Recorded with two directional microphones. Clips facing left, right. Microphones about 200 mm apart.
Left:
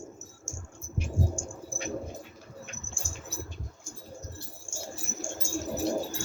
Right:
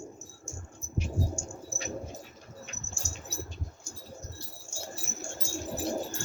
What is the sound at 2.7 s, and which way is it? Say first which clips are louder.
Bird flight: left 1 dB; 50° left (ahead or behind).